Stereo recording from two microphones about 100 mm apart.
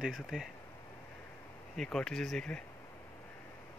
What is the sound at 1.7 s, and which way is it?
Speech, 5° left (ahead or behind).